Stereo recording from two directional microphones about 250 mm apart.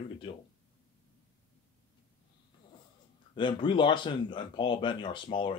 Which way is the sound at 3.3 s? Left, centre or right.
Centre.